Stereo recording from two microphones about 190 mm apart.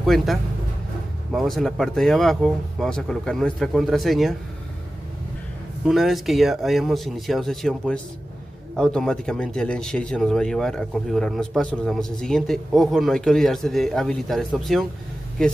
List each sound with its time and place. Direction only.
0.0 s a man's voice: centre (ahead or behind)
5.9 s speech: centre (ahead or behind)